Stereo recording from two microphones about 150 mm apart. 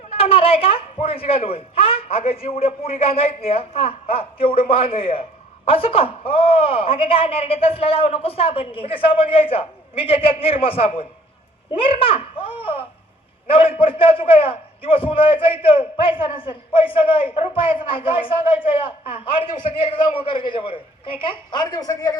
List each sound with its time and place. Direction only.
0.1 s a man's voice: 40° left (ahead or behind)
11.7 s a sound: 35° left (ahead or behind)
13.5 s a man's voice: 40° left (ahead or behind)